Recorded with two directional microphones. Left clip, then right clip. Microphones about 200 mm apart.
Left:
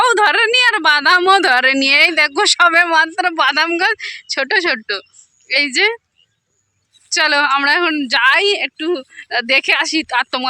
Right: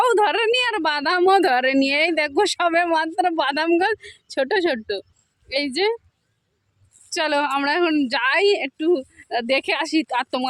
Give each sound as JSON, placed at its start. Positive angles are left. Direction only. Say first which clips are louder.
{"t": 0.0, "sound": "a woman's voice", "louder": "left 6 dB", "side_deg": -5}
{"t": 5.5, "sound": "a woman's voice", "louder": "left 7 dB", "side_deg": 0}
{"t": 7.1, "sound": "a woman's voice", "louder": "left 7 dB", "side_deg": 0}